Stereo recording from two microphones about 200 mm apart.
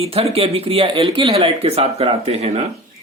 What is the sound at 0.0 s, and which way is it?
Speech, 30° right (ahead or behind).